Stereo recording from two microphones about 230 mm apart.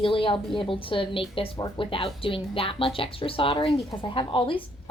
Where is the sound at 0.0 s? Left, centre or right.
Left.